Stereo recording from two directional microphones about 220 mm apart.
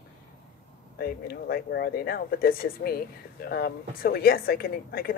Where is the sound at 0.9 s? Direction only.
45° left (ahead or behind).